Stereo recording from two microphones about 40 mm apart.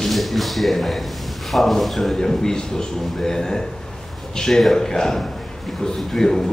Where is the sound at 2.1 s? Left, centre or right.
Centre.